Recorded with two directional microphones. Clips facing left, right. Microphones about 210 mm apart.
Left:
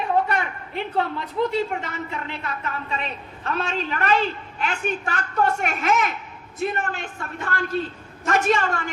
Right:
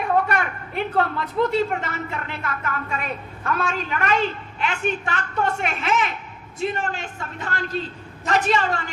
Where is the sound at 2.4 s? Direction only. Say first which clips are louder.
Right 4 dB; 55° right (ahead or behind).